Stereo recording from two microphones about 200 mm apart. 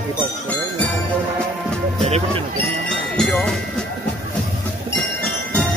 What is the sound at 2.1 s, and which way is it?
Speech, 30° right (ahead or behind).